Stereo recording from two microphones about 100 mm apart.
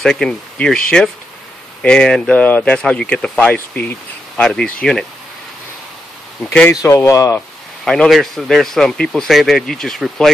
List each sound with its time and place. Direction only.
0.0 s speech: 5° left (ahead or behind)
6.7 s speech: 35° left (ahead or behind)
7.8 s a man's voice: 5° left (ahead or behind)